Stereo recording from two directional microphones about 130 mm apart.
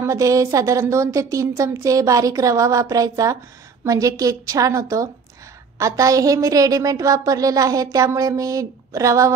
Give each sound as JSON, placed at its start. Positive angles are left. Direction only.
{"t": 0.0, "sound": "a woman's voice", "side_deg": -25}